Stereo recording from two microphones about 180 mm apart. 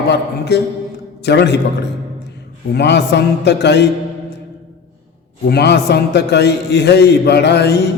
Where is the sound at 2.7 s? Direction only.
70° left (ahead or behind).